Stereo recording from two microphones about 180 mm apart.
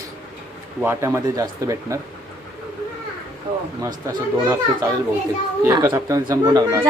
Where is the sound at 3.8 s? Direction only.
15° right (ahead or behind).